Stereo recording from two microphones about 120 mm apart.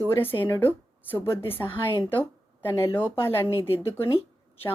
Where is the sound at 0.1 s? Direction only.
15° left (ahead or behind).